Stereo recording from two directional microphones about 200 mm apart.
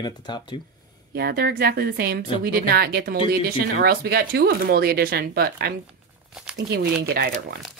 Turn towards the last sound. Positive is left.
turn(degrees=-50)  # may be behind; listen again after turning